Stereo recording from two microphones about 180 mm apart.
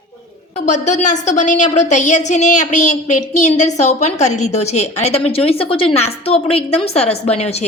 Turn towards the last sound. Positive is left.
turn(degrees=35)  # may be behind; listen again after turning